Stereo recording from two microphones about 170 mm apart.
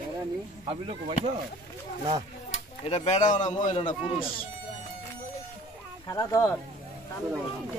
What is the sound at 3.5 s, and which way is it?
Speech, 45° left (ahead or behind).